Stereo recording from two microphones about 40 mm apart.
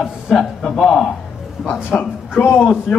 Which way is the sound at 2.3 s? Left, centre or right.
Left.